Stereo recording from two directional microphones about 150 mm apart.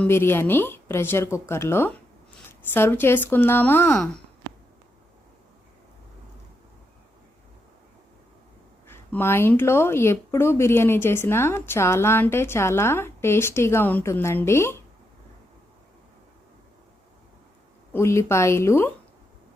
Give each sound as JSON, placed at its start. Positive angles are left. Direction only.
{"t": 0.0, "sound": "speech", "side_deg": 15}
{"t": 8.9, "sound": "speech", "side_deg": 15}
{"t": 17.9, "sound": "speech", "side_deg": 20}